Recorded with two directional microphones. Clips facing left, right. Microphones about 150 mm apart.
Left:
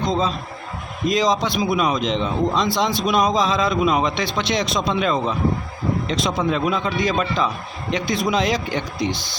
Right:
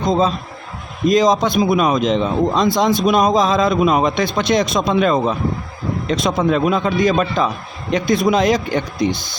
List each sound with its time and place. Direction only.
0.1 s a man's voice: 45° right (ahead or behind)